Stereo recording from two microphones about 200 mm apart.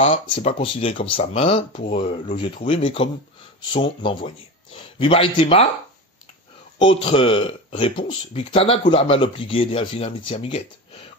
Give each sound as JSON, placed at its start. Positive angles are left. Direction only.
{"t": 0.0, "sound": "speech", "side_deg": 30}
{"t": 6.8, "sound": "speech", "side_deg": 30}